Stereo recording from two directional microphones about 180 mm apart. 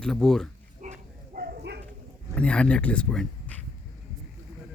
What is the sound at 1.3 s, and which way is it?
Bow-wow, 60° right (ahead or behind).